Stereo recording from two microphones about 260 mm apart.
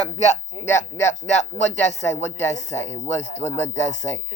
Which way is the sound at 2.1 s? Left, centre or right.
Centre.